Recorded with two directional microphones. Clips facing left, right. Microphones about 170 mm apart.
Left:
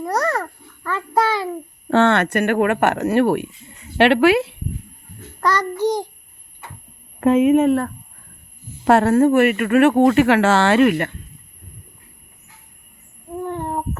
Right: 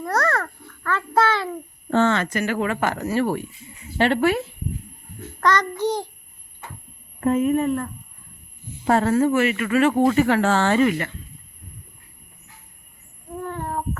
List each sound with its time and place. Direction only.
0.0 s a sound: 15° left (ahead or behind)
1.9 s speech: 75° left (ahead or behind)
3.9 s speech: 80° left
5.4 s child singing: 10° left (ahead or behind)
7.2 s speech: 90° left; by 11.2 s 55° left (ahead or behind)
13.3 s a sound: 15° left (ahead or behind)